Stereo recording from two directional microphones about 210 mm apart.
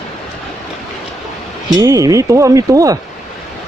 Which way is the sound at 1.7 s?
15° right (ahead or behind).